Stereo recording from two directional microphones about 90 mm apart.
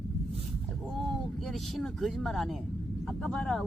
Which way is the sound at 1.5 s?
5° left (ahead or behind).